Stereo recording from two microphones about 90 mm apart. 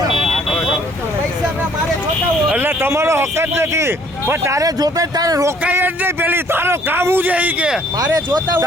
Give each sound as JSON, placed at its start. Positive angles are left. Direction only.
{"t": 0.1, "sound": "vehicle", "side_deg": 0}
{"t": 2.6, "sound": "speech", "side_deg": -25}
{"t": 5.6, "sound": "a man's voice", "side_deg": -20}